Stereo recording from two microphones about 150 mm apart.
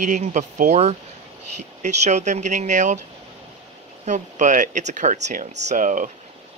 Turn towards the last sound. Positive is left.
turn(degrees=-60)  # may be behind; listen again after turning